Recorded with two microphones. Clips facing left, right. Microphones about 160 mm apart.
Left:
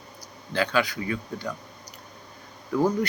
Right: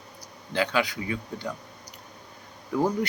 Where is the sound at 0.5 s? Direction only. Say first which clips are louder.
Left 1 dB; 20° right (ahead or behind).